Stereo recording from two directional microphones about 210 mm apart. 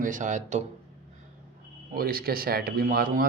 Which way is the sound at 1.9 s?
45° right (ahead or behind).